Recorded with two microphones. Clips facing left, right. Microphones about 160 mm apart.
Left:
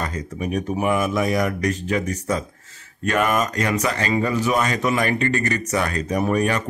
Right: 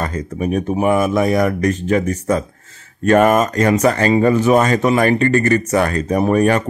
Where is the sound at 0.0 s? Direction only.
50° right (ahead or behind).